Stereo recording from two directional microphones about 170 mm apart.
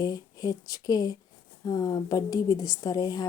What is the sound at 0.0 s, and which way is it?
A woman's voice, 20° left (ahead or behind).